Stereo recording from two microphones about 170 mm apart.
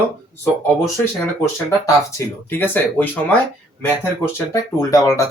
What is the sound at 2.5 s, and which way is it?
Speech, 10° left (ahead or behind).